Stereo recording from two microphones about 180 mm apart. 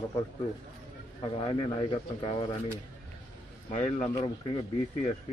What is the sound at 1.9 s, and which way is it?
Speech, 30° left (ahead or behind).